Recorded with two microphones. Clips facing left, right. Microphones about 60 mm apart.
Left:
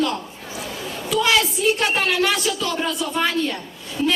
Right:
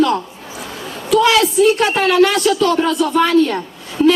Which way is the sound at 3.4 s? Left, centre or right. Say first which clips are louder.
Right 7 dB; right.